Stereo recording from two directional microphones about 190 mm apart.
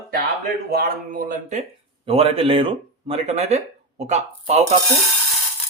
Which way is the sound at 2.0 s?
30° right (ahead or behind).